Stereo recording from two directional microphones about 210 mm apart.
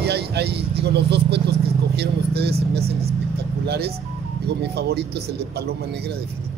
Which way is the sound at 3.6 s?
50° right (ahead or behind).